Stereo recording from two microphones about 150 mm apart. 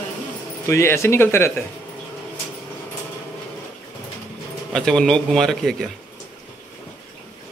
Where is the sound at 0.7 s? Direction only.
20° left (ahead or behind).